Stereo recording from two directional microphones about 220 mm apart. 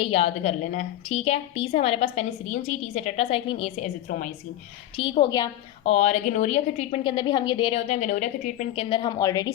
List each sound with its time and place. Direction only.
0.0 s a woman's voice: 25° left (ahead or behind)
4.9 s a woman's voice: 25° left (ahead or behind)
5.8 s a woman's voice: 30° left (ahead or behind)